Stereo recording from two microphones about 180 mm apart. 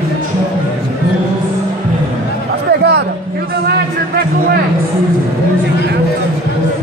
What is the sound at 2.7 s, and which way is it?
Music, 65° right (ahead or behind).